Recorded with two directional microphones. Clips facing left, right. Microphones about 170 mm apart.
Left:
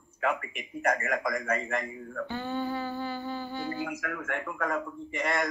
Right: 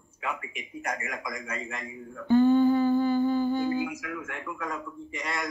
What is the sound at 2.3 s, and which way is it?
Humming, 45° right (ahead or behind).